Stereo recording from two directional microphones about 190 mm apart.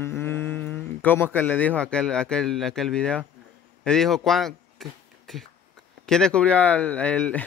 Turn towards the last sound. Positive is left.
turn(degrees=5)  # may be behind; listen again after turning